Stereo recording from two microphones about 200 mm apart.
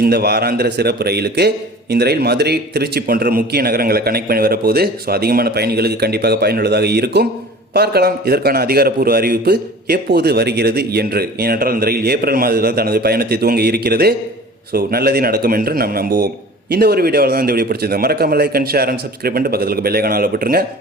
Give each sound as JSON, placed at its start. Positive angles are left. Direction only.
{"t": 0.0, "sound": "a man's voice", "side_deg": -50}